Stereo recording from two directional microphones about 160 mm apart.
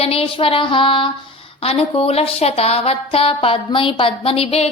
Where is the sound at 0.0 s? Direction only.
35° left (ahead or behind).